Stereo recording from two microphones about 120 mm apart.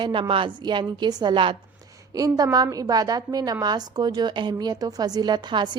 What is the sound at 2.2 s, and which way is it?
A woman's voice, 30° right (ahead or behind).